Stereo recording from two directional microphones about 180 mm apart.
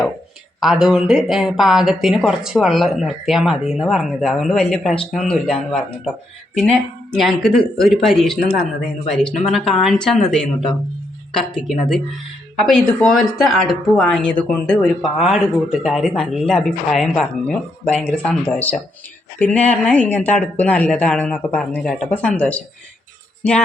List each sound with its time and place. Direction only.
0.6 s speech: 5° right (ahead or behind)
11.5 s speech: centre (ahead or behind)